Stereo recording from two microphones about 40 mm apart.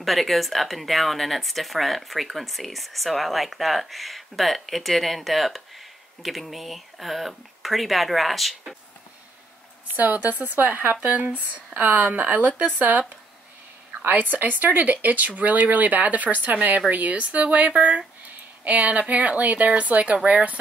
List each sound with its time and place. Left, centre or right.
0.0 s speech: centre
9.9 s speech: right
14.0 s speech: right